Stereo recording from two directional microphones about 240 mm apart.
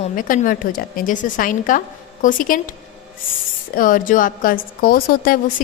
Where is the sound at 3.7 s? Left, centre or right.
Left.